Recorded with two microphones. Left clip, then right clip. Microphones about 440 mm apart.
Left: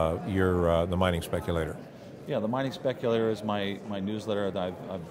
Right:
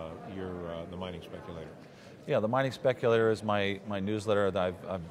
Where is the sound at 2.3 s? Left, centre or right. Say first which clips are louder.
Right 2 dB; right.